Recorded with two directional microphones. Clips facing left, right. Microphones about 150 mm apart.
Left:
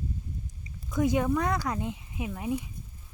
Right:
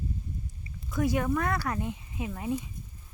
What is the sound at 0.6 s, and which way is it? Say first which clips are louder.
Speech: left 2 dB; 20° left (ahead or behind).